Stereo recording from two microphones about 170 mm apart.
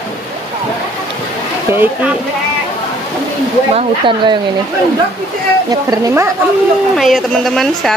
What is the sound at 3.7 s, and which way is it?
Speech, 30° right (ahead or behind).